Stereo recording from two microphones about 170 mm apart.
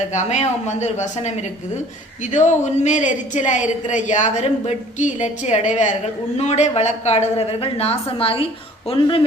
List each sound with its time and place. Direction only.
0.0 s a woman's voice: 45° left (ahead or behind)
2.3 s a woman's voice: 45° left (ahead or behind)